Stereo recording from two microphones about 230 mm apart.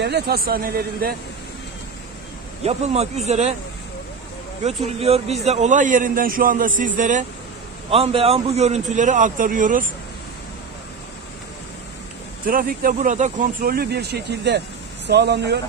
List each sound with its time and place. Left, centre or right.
0.0 s speech: right
2.6 s speech: right
4.6 s speech: right
12.4 s speech: right